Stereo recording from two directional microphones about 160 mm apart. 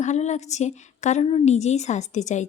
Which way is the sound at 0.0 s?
45° left (ahead or behind).